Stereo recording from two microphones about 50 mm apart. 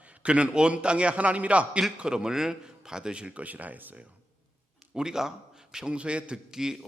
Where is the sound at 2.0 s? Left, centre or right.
Centre; by 4.1 s right.